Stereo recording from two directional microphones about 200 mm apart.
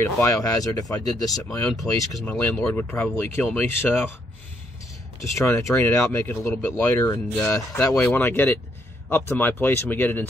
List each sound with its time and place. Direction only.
0.3 s speech: 15° left (ahead or behind)
1.8 s speech: 5° left (ahead or behind)
5.3 s speech: 15° left (ahead or behind)